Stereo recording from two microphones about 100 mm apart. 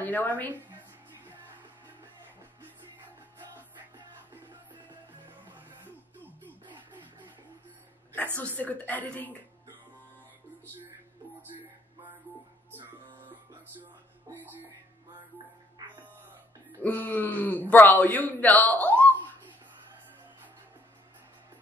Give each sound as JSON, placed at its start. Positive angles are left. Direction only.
{"t": 0.0, "sound": "a woman's voice", "side_deg": 15}
{"t": 8.4, "sound": "speech", "side_deg": 15}
{"t": 16.8, "sound": "speech", "side_deg": 15}